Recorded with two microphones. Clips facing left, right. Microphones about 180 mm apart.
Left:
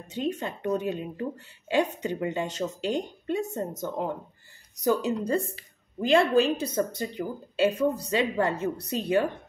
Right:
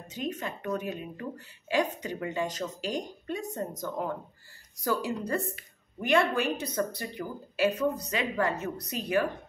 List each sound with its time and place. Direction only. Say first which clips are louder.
0.1 s a woman's voice: left 4 dB; 30° left (ahead or behind)